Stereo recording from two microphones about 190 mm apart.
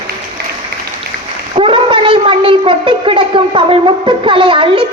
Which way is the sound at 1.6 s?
25° right (ahead or behind).